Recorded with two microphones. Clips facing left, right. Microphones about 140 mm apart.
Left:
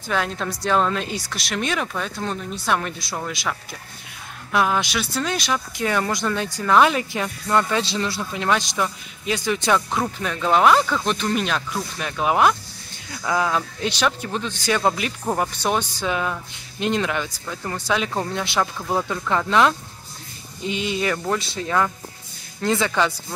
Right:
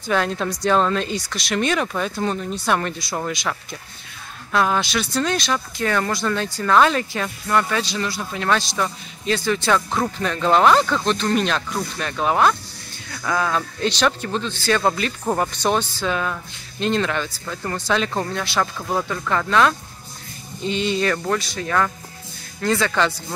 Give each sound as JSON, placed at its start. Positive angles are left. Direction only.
{"t": 0.1, "sound": "speech", "side_deg": 0}
{"t": 4.5, "sound": "speech", "side_deg": 15}
{"t": 18.3, "sound": "speech", "side_deg": 20}
{"t": 21.4, "sound": "speech", "side_deg": 20}